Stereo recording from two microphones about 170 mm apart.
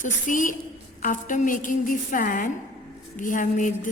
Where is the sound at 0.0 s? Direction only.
50° left (ahead or behind).